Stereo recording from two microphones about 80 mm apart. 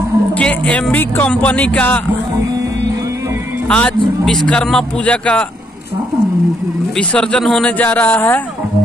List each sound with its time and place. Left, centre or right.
0.4 s a man's voice: centre
3.6 s speech: centre
7.0 s speech: centre
7.8 s speech: left